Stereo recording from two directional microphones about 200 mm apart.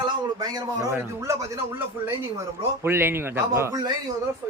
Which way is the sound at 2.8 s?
10° right (ahead or behind).